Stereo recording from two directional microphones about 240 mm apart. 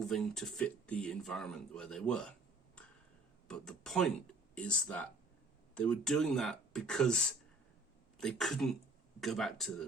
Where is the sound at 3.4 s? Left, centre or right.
Centre.